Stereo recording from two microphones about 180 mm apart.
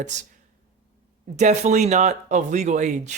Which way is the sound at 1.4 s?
40° right (ahead or behind).